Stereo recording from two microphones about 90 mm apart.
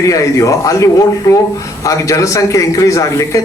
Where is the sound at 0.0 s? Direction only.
35° left (ahead or behind).